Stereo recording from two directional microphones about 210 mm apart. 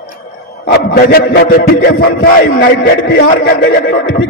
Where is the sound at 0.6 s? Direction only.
50° left (ahead or behind).